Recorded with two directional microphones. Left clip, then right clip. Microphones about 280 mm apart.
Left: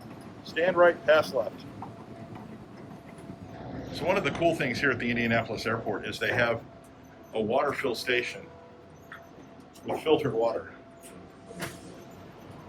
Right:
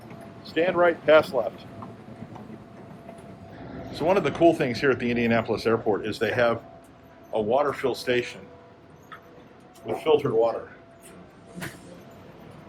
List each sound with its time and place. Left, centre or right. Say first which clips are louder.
0.4 s speech: right 1 dB; right
3.9 s speech: right 5 dB; centre
9.8 s speech: right 3 dB; centre